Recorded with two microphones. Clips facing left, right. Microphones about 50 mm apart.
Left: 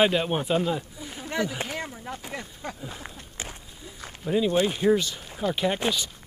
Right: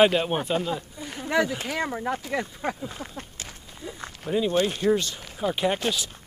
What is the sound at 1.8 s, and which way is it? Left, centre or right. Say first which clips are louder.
Speech: right 8 dB; right.